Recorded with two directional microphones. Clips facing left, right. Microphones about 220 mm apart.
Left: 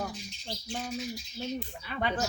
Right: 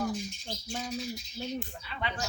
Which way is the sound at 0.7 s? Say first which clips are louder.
Even; centre (ahead or behind).